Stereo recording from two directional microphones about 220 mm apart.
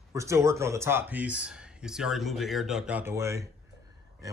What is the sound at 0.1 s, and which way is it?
Speech, 15° right (ahead or behind).